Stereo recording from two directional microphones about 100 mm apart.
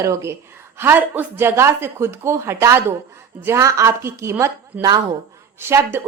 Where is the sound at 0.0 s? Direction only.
30° right (ahead or behind).